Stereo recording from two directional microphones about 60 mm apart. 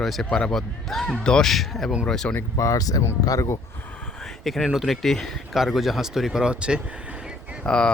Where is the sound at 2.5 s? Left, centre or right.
Left.